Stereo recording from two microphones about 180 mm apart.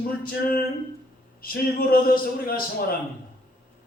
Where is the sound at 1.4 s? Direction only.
55° left (ahead or behind).